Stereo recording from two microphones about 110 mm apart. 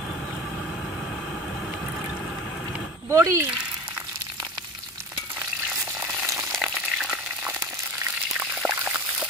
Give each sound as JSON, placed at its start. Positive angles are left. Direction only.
{"t": 3.1, "sound": "speech", "side_deg": -25}
{"t": 5.9, "sound": "frying", "side_deg": -25}
{"t": 6.6, "sound": "frying", "side_deg": -5}
{"t": 8.4, "sound": "a sound", "side_deg": -20}